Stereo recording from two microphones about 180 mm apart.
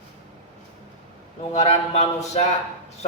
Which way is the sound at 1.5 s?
35° left (ahead or behind).